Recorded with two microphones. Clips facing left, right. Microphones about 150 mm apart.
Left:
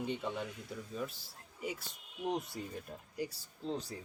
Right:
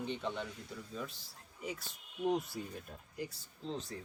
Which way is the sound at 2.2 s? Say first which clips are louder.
Right 3 dB; centre (ahead or behind).